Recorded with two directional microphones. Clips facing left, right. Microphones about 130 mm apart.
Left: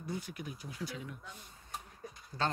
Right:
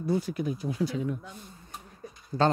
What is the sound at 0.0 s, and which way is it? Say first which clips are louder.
Speech: right 13 dB; 35° right (ahead or behind).